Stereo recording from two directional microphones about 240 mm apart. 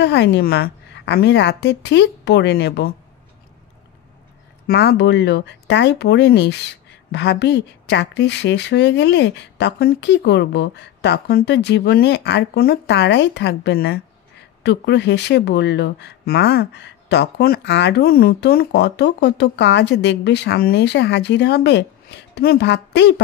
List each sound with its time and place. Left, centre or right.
0.0 s speech: left
4.6 s speech: left